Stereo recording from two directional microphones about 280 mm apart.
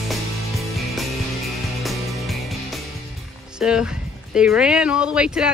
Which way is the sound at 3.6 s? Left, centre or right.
Centre.